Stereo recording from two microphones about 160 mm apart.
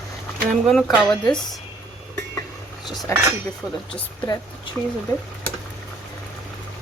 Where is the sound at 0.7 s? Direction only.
Centre (ahead or behind).